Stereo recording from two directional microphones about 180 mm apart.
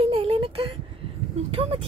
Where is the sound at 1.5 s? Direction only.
30° right (ahead or behind).